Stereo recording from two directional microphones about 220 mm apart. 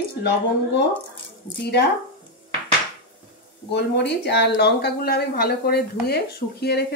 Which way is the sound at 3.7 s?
50° left (ahead or behind).